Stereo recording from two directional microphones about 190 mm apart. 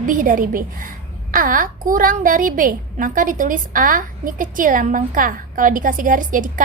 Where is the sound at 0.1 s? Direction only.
45° right (ahead or behind).